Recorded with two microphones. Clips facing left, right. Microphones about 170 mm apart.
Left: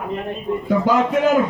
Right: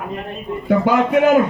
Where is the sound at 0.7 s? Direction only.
60° right (ahead or behind).